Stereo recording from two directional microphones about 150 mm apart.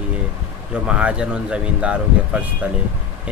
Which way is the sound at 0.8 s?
5° right (ahead or behind).